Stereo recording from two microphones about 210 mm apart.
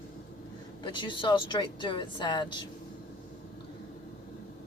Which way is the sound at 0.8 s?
20° left (ahead or behind).